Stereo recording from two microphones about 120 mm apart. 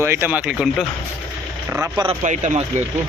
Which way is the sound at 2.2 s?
90° right.